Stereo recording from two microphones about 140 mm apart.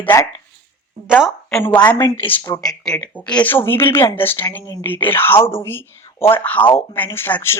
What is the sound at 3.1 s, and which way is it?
Speech, 10° left (ahead or behind).